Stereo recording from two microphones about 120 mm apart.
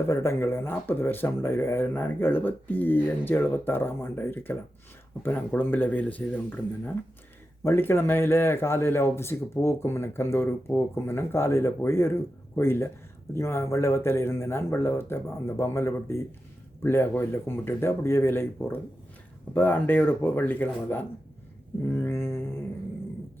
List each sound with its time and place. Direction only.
0.1 s a man's voice: 20° left (ahead or behind)
21.8 s mantra: 15° left (ahead or behind)